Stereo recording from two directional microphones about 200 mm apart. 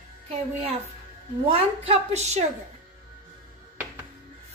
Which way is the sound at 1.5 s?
30° right (ahead or behind).